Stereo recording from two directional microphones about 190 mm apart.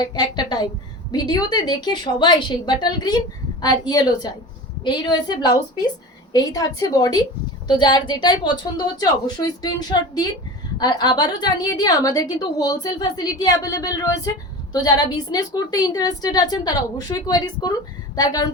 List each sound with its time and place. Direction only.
0.0 s a woman's voice: 25° left (ahead or behind)